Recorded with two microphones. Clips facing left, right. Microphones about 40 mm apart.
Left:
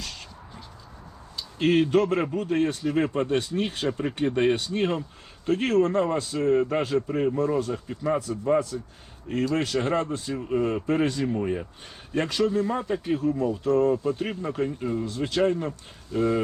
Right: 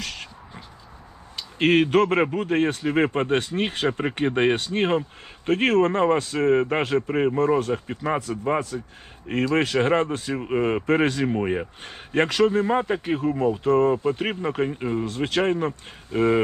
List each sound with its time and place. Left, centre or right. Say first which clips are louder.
0.0 s a sound: right 5 dB; right
1.4 s a man's voice: right 3 dB; right
11.2 s a man's voice: right 3 dB; right
15.0 s a man's voice: even; right